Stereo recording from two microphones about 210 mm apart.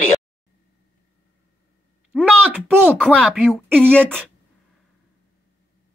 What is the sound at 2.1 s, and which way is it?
Speech, 5° left (ahead or behind).